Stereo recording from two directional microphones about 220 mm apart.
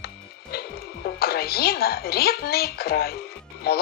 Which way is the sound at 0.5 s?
45° left (ahead or behind).